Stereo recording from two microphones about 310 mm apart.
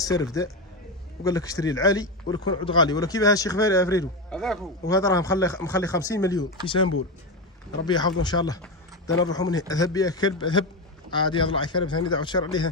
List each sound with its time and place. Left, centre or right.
0.0 s a man's voice: centre